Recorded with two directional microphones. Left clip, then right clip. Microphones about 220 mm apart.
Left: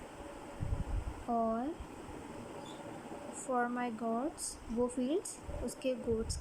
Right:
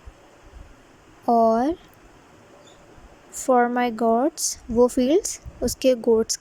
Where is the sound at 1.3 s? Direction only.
35° right (ahead or behind).